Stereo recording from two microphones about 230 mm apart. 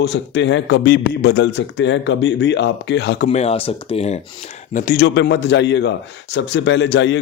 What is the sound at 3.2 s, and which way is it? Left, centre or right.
Speech, left.